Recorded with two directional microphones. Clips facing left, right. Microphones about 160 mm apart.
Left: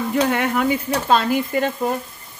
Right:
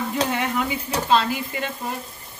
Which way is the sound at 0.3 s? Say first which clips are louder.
Left 5 dB; 55° left (ahead or behind).